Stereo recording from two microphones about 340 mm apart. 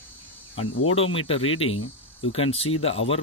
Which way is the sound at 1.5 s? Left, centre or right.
Left.